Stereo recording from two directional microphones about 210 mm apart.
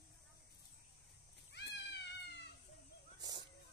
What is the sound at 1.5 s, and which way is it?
Cat, 55° left (ahead or behind).